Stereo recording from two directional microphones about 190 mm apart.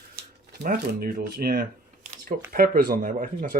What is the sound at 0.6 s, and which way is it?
Speech, 50° right (ahead or behind).